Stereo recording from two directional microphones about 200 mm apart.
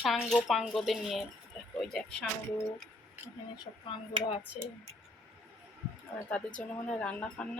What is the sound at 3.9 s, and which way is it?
Speech, 25° left (ahead or behind).